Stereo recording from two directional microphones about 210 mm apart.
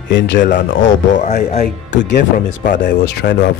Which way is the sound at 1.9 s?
55° left (ahead or behind).